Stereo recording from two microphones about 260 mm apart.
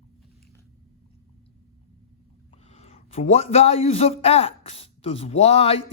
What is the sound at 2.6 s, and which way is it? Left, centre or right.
A man's voice, left.